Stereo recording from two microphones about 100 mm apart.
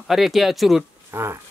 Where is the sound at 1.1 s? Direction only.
25° right (ahead or behind).